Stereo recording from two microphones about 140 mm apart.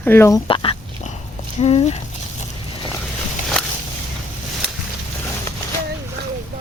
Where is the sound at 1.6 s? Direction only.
50° left (ahead or behind).